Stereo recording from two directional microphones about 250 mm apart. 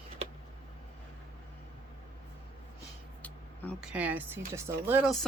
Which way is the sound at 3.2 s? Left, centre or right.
Centre.